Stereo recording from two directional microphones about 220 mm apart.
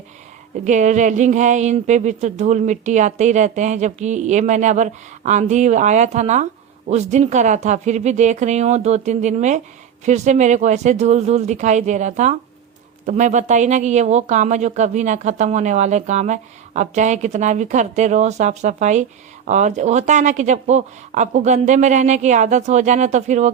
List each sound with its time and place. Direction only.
0.6 s speech: 35° right (ahead or behind)